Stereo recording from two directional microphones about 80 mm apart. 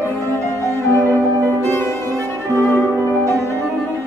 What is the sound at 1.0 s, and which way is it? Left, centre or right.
Music, right.